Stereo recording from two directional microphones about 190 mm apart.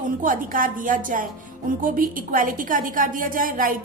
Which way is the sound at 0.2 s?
45° right (ahead or behind).